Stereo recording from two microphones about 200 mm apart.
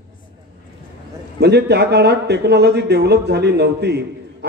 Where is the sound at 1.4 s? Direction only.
55° right (ahead or behind).